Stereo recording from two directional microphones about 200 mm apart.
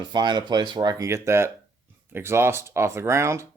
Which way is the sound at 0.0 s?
20° right (ahead or behind).